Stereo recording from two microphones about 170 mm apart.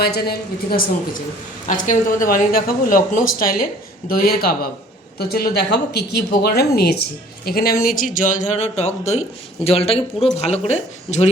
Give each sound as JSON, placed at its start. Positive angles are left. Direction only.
{"t": 0.0, "sound": "speech", "side_deg": 70}
{"t": 1.6, "sound": "speech", "side_deg": 50}
{"t": 7.9, "sound": "speech", "side_deg": 55}